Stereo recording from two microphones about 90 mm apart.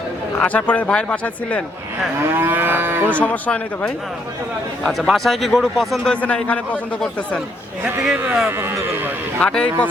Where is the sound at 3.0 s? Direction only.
15° left (ahead or behind).